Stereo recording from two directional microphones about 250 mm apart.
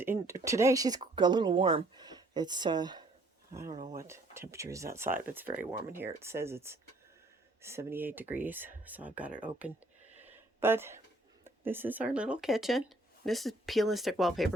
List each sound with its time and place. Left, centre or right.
0.0 s speech: centre
10.2 s a sound: centre
11.4 s speech: centre